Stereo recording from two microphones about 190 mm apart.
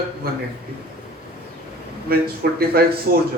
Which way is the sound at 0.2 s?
50° right (ahead or behind).